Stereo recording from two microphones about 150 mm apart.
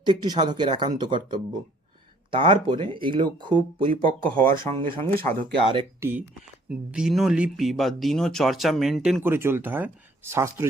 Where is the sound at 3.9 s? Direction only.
70° right (ahead or behind).